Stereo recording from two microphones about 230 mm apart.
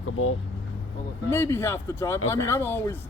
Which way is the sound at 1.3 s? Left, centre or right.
Centre.